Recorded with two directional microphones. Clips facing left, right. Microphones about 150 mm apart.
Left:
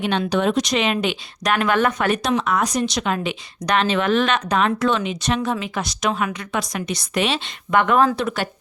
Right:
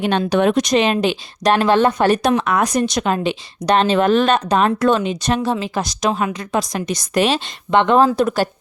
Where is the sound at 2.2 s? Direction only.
55° right (ahead or behind).